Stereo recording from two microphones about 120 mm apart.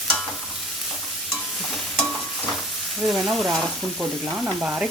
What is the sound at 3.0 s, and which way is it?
Stir, centre (ahead or behind).